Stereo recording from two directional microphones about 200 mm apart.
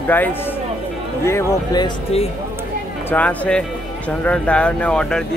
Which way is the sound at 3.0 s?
5° left (ahead or behind).